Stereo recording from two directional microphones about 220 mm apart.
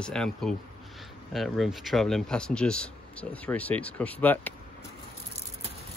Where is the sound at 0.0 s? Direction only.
5° left (ahead or behind).